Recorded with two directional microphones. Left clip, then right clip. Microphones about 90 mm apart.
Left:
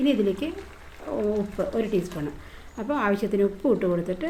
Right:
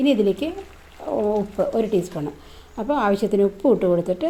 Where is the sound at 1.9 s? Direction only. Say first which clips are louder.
Right 4 dB; 50° right (ahead or behind).